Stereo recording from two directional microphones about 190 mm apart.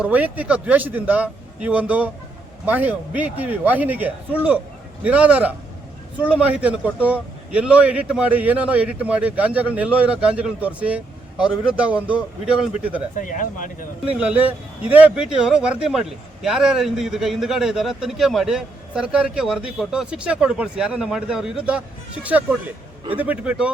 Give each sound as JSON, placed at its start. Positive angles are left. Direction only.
{"t": 0.0, "sound": "a man's voice", "side_deg": -10}
{"t": 13.2, "sound": "speech", "side_deg": 45}
{"t": 14.2, "sound": "a man's voice", "side_deg": -5}